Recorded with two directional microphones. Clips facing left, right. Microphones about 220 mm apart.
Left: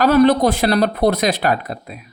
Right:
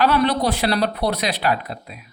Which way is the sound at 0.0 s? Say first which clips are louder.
Left 6 dB; 45° left (ahead or behind).